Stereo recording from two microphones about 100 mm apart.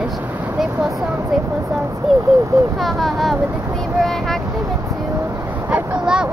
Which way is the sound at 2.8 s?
Centre (ahead or behind).